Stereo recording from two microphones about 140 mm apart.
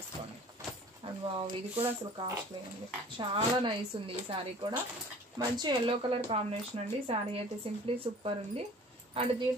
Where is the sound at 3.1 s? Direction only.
35° right (ahead or behind).